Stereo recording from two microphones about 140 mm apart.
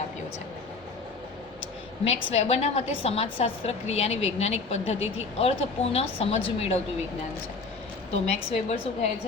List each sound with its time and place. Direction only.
2.0 s a woman's voice: 50° left (ahead or behind)
8.1 s a woman's voice: 45° left (ahead or behind)